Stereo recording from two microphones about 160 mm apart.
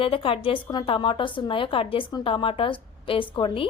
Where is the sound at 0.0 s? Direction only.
35° left (ahead or behind).